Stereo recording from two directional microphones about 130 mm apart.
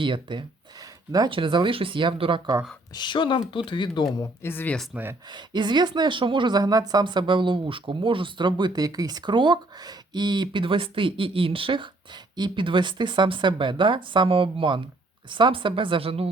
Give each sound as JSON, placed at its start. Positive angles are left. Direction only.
{"t": 0.0, "sound": "speech", "side_deg": -40}
{"t": 2.9, "sound": "speech", "side_deg": 35}
{"t": 4.2, "sound": "speech", "side_deg": 15}
{"t": 5.3, "sound": "speech", "side_deg": -35}